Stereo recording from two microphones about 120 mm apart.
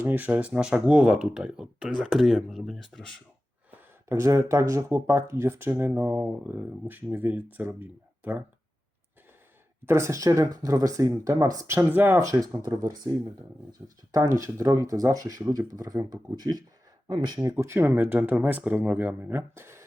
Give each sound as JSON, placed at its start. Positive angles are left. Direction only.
{"t": 0.0, "sound": "speech", "side_deg": -15}
{"t": 3.7, "sound": "speech", "side_deg": -25}
{"t": 9.8, "sound": "speech", "side_deg": -20}
{"t": 17.6, "sound": "speech", "side_deg": -20}